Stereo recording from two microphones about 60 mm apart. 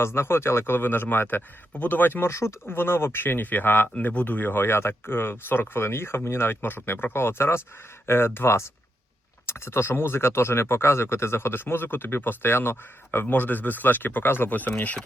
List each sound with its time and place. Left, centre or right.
0.0 s speech: left
2.3 s speech: left